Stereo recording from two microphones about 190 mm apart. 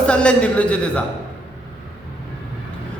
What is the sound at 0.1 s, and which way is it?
Speech, 5° left (ahead or behind).